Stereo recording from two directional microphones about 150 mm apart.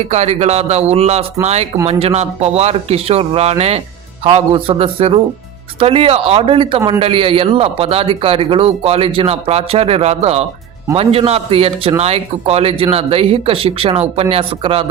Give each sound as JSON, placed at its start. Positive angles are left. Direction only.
{"t": 0.0, "sound": "a man's voice", "side_deg": -45}